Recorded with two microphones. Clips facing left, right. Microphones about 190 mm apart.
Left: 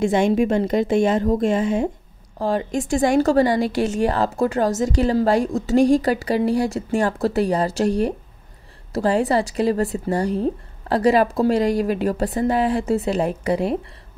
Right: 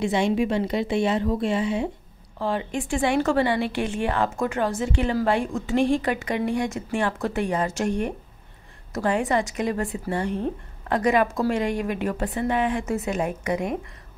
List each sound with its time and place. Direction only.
0.0 s a woman's voice: 50° left (ahead or behind); by 13.7 s 30° left (ahead or behind)